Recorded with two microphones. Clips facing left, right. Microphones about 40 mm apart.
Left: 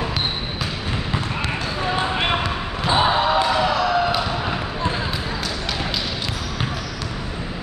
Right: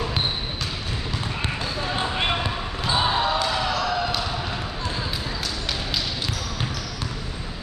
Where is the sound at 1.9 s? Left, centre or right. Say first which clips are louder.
Left 4 dB; centre.